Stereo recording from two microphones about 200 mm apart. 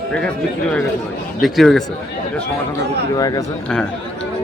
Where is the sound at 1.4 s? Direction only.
Centre (ahead or behind).